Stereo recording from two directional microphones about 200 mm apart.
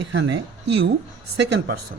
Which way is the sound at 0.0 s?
65° right (ahead or behind).